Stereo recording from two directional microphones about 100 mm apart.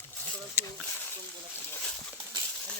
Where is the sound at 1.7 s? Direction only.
10° left (ahead or behind).